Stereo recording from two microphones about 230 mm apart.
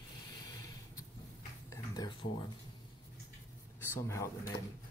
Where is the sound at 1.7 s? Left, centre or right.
Centre.